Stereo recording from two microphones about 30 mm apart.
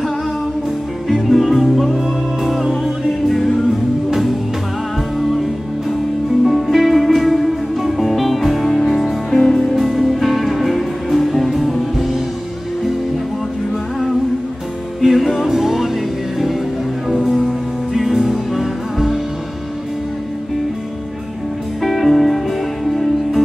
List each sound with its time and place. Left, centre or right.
1.0 s music: centre
9.3 s music: left
9.8 s music: centre
15.0 s music: centre
17.1 s music: centre
21.8 s music: centre